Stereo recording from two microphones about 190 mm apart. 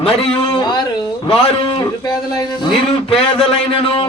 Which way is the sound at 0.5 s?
20° left (ahead or behind).